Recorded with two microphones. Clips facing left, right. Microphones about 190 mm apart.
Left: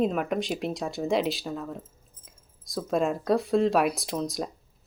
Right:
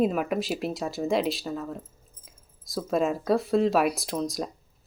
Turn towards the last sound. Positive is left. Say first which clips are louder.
# right 1 dB
turn(degrees=0)  # may be behind; listen again after turning